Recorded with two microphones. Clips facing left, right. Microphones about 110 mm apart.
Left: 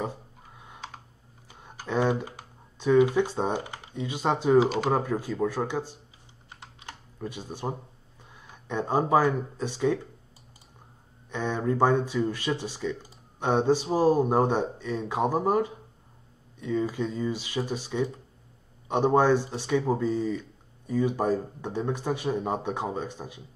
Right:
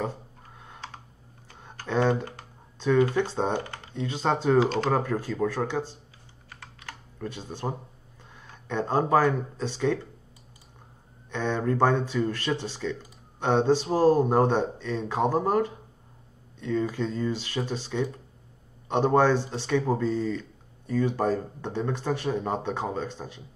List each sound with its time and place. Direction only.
0.0 s computer keyboard: 10° left (ahead or behind)
1.5 s speech: 10° left (ahead or behind)
6.5 s typing: 20° left (ahead or behind)
7.2 s speech: 10° left (ahead or behind)
8.5 s a sound: 10° left (ahead or behind)
9.6 s speech: 10° left (ahead or behind)
11.2 s speech: 10° left (ahead or behind)